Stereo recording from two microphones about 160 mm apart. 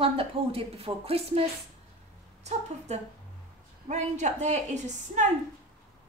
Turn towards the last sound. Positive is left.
turn(degrees=-50)  # may be behind; listen again after turning